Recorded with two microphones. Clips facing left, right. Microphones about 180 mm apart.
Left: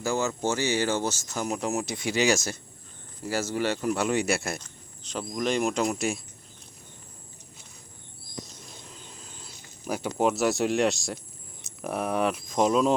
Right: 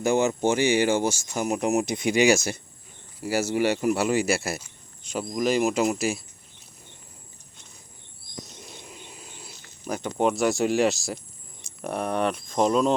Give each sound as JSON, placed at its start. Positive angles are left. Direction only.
{"t": 0.0, "sound": "speech", "side_deg": -20}
{"t": 8.8, "sound": "cricket", "side_deg": -10}
{"t": 9.8, "sound": "speech", "side_deg": 5}